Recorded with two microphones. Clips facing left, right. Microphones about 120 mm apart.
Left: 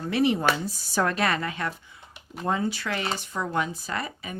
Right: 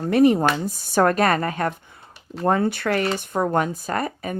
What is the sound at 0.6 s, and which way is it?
Speech, 55° right (ahead or behind).